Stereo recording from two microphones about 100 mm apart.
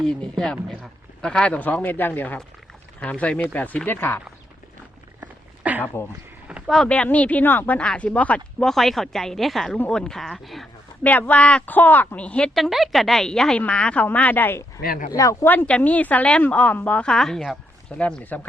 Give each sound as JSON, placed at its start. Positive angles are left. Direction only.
{"t": 0.0, "sound": "a woman's voice", "side_deg": 5}
{"t": 5.2, "sound": "dog", "side_deg": -15}
{"t": 6.5, "sound": "a sound", "side_deg": -10}
{"t": 6.8, "sound": "a woman's voice", "side_deg": 10}
{"t": 11.0, "sound": "a woman's voice", "side_deg": 15}
{"t": 12.5, "sound": "a woman's voice", "side_deg": 0}
{"t": 15.1, "sound": "speech", "side_deg": 30}
{"t": 15.4, "sound": "a woman's voice", "side_deg": 15}
{"t": 17.9, "sound": "a woman's voice", "side_deg": 15}